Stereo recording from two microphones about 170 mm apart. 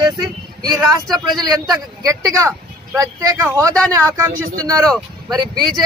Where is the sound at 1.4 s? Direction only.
20° right (ahead or behind).